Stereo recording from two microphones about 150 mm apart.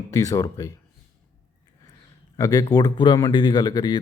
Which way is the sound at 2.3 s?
25° left (ahead or behind).